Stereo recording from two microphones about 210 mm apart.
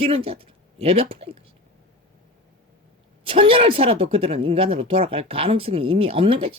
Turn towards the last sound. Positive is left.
turn(degrees=-25)  # may be behind; listen again after turning